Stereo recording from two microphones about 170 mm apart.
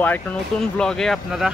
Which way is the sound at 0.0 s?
10° left (ahead or behind).